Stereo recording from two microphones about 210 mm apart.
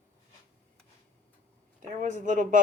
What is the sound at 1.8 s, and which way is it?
Speech, 35° right (ahead or behind).